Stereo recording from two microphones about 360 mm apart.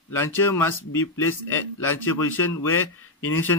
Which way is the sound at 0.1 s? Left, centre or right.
Centre.